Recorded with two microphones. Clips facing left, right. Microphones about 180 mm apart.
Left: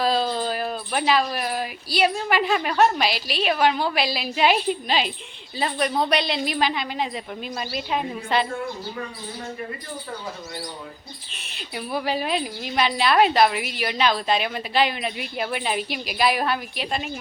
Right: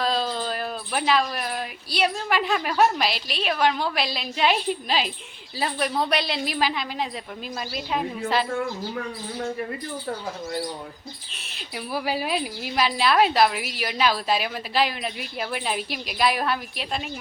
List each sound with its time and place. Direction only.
0.0 s a woman's voice: 5° left (ahead or behind)
11.4 s a woman's voice: centre (ahead or behind)